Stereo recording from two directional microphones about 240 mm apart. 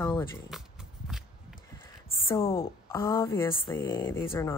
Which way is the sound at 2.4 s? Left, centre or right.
Centre.